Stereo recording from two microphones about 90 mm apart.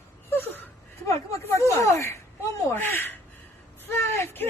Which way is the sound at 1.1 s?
35° left (ahead or behind).